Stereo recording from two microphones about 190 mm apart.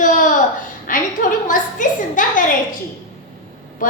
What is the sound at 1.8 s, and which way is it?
Speech, 40° left (ahead or behind).